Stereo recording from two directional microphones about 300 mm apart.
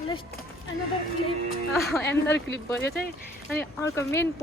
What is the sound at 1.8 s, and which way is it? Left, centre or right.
Speech, centre.